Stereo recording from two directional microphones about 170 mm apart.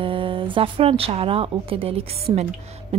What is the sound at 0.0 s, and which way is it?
Speech, 30° right (ahead or behind).